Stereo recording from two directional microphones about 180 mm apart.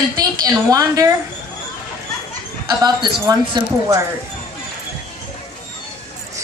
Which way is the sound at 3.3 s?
20° right (ahead or behind).